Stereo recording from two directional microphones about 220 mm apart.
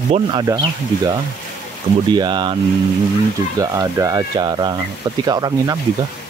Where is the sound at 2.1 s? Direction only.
20° right (ahead or behind).